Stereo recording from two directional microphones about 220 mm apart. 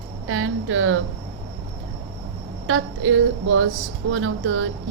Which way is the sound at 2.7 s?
60° right (ahead or behind).